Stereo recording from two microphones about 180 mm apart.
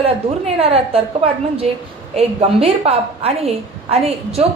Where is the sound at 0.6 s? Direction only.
30° right (ahead or behind).